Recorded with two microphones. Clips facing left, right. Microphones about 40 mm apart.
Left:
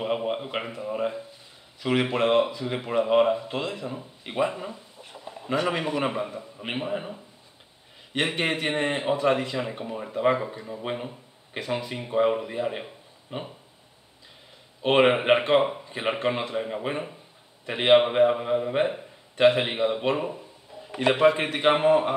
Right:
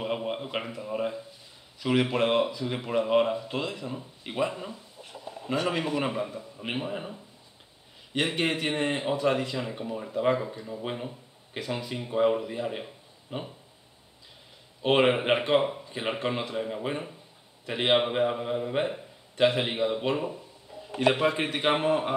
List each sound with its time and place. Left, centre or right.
0.0 s a sound: centre
1.8 s a man's voice: centre
14.8 s a man's voice: centre